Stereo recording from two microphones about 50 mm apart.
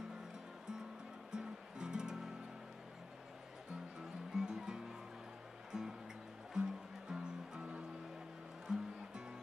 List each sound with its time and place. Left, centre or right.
1.3 s music: centre
4.4 s music: centre